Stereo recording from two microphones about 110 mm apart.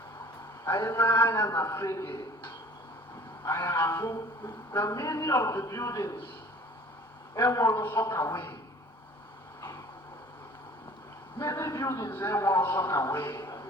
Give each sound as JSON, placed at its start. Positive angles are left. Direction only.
{"t": 0.6, "sound": "speech", "side_deg": 30}
{"t": 7.3, "sound": "speech", "side_deg": 30}
{"t": 11.3, "sound": "a man's voice", "side_deg": 30}